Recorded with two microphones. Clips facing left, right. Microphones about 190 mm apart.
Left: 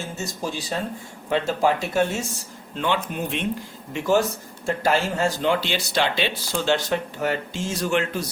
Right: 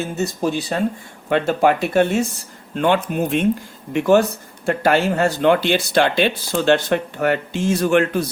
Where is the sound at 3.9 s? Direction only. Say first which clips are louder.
Right 6 dB; 60° right (ahead or behind).